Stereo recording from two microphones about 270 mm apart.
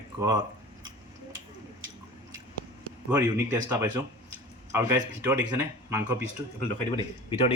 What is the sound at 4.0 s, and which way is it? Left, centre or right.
Speech, centre.